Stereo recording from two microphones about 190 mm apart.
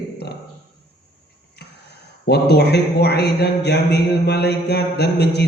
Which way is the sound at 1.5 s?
60° left (ahead or behind).